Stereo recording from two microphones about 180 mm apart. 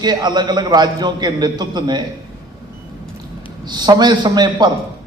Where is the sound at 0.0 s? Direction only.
25° right (ahead or behind).